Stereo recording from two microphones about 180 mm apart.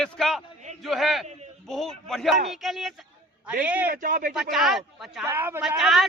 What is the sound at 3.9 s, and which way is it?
Speech, 45° right (ahead or behind).